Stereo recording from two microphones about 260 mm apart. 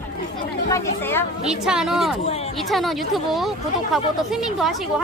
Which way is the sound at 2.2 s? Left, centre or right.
Left.